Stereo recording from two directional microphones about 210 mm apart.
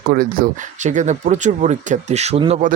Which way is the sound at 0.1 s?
40° right (ahead or behind).